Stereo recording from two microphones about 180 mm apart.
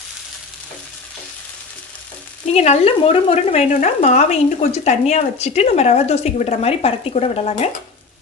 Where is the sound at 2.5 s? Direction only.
35° left (ahead or behind).